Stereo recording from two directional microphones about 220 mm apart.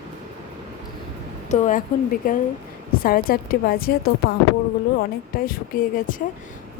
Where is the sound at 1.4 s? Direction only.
35° left (ahead or behind).